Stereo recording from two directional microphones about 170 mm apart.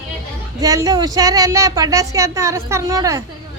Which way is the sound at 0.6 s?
20° right (ahead or behind).